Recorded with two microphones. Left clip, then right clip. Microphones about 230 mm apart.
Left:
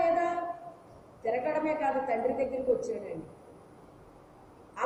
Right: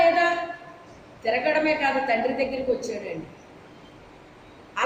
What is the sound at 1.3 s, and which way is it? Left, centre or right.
Speech, centre.